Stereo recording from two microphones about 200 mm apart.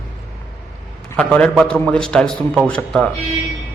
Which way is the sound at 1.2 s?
5° left (ahead or behind).